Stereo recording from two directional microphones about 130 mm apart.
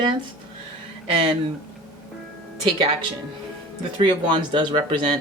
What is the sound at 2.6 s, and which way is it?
Speech, 45° right (ahead or behind).